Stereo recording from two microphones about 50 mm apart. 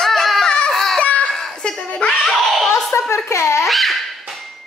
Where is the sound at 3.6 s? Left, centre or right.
Centre.